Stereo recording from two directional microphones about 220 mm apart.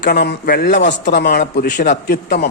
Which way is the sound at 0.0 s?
45° left (ahead or behind).